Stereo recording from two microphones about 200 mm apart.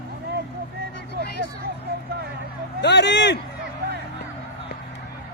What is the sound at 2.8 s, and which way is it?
Speech, 60° left (ahead or behind).